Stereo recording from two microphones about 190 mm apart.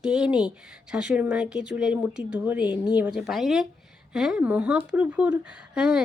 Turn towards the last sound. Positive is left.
turn(degrees=-5)  # may be behind; listen again after turning